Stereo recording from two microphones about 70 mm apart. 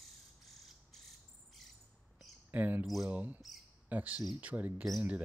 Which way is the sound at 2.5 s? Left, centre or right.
Right.